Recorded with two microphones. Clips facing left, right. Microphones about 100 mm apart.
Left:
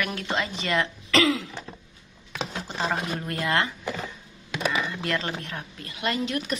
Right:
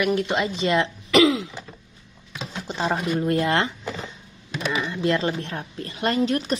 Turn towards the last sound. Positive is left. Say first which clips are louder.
# right 5 dB
turn(degrees=-35)  # may be behind; listen again after turning